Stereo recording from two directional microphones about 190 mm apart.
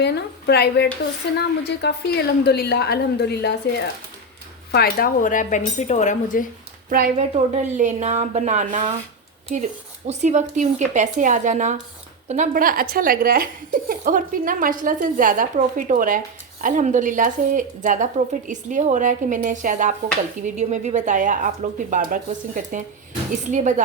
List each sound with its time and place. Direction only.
0.0 s a woman's voice: 60° left (ahead or behind)
4.7 s speech: 55° left (ahead or behind)
6.9 s speech: 45° right (ahead or behind)
7.3 s a woman's voice: 35° right (ahead or behind)